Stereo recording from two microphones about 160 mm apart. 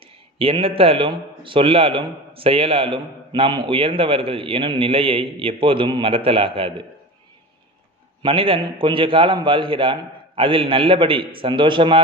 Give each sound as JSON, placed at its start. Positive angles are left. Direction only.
{"t": 0.4, "sound": "a man's voice", "side_deg": -35}
{"t": 8.2, "sound": "a man's voice", "side_deg": -35}